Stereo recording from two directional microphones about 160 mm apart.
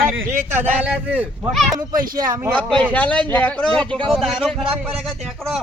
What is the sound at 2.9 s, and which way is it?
A man's voice, 10° left (ahead or behind).